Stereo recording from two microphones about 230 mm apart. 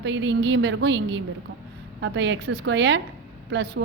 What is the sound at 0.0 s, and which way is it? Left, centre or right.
A woman's voice, right.